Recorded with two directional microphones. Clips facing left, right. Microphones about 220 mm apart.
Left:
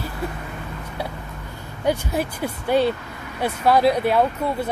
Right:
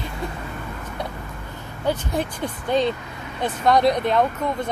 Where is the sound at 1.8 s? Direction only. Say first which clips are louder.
Left 1 dB; 5° left (ahead or behind).